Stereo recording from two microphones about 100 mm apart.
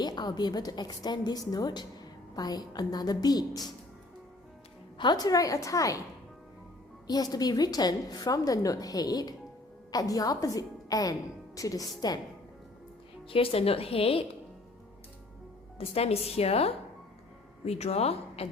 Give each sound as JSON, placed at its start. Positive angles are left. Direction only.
{"t": 0.0, "sound": "a woman's voice", "side_deg": 45}
{"t": 4.9, "sound": "a woman's voice", "side_deg": 45}
{"t": 7.1, "sound": "a woman's voice", "side_deg": 40}
{"t": 13.2, "sound": "speech", "side_deg": 65}
{"t": 15.8, "sound": "a woman's voice", "side_deg": 85}